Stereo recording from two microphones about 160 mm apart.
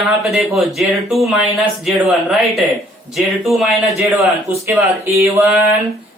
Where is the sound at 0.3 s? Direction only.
Centre (ahead or behind).